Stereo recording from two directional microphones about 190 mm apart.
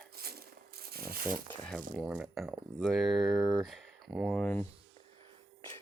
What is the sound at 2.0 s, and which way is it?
Speech, 5° right (ahead or behind).